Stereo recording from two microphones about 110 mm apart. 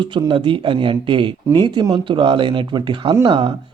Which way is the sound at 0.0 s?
45° right (ahead or behind).